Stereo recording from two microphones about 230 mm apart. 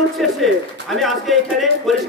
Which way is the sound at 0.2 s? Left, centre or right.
Centre.